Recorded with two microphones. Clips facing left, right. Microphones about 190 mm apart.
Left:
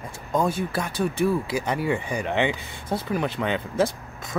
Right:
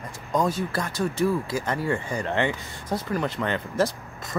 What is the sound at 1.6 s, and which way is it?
Speech, 15° left (ahead or behind).